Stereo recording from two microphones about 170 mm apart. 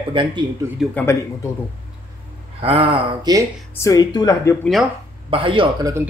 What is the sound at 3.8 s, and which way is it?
Speech, 20° left (ahead or behind).